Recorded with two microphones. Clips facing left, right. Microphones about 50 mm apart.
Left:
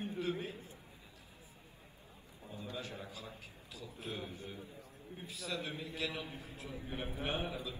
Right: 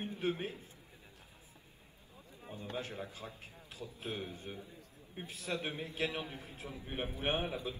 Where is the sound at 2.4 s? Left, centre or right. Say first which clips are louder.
Right 2 dB; right.